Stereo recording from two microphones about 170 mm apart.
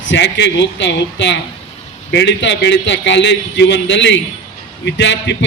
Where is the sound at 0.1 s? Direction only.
90° left.